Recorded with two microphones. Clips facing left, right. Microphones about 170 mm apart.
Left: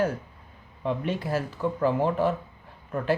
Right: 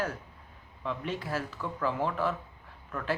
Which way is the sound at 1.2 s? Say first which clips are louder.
Left 7 dB; 15° left (ahead or behind).